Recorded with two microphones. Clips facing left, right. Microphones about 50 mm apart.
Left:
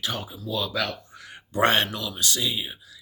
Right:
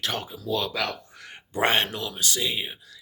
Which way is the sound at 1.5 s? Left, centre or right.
Right.